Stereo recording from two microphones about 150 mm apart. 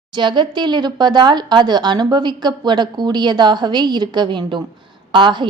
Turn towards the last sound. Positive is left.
turn(degrees=-30)  # may be behind; listen again after turning